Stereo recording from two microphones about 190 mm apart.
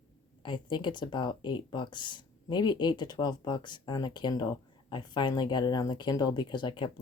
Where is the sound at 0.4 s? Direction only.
25° left (ahead or behind).